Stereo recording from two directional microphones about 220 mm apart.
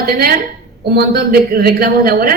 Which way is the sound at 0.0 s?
45° right (ahead or behind).